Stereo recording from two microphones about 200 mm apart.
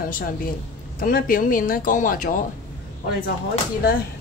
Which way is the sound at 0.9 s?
45° left (ahead or behind).